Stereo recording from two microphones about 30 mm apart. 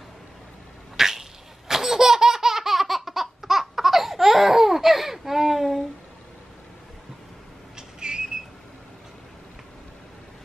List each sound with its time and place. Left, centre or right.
0.9 s sneeze: centre
1.7 s laughter: centre
7.7 s whistle: right